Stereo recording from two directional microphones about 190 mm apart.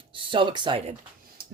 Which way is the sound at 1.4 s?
55° right (ahead or behind).